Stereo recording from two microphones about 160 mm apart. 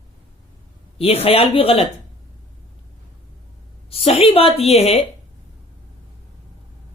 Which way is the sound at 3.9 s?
35° left (ahead or behind).